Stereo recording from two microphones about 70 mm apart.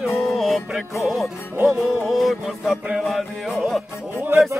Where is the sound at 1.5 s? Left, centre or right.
Right.